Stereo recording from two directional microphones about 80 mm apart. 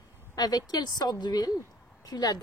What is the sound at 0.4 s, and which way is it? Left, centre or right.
A woman's voice, left.